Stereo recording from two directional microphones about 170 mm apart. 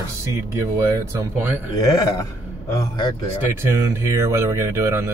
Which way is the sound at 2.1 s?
20° left (ahead or behind).